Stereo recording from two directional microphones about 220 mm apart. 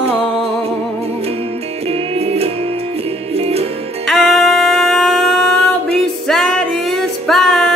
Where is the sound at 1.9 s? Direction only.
25° right (ahead or behind).